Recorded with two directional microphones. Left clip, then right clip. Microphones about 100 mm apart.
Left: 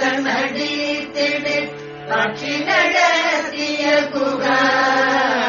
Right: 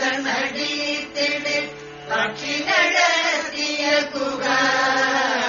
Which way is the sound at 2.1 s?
40° right (ahead or behind).